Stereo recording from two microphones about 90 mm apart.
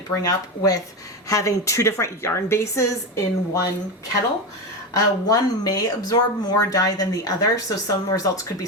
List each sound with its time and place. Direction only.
0.2 s a woman's voice: 40° left (ahead or behind)
4.9 s speech: 45° left (ahead or behind)